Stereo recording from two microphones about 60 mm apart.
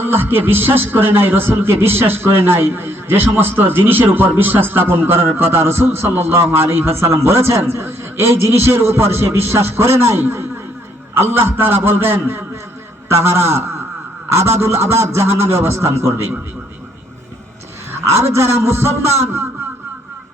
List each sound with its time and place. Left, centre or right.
0.0 s a man's voice: right
14.6 s a man's voice: right
18.3 s a man's voice: right